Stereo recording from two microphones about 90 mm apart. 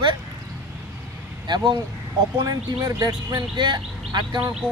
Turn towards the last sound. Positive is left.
turn(degrees=-10)  # may be behind; listen again after turning